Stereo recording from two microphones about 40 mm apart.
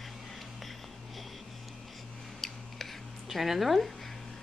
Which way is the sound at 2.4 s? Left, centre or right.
Centre.